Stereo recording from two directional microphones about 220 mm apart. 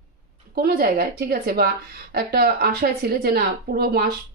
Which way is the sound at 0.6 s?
45° right (ahead or behind).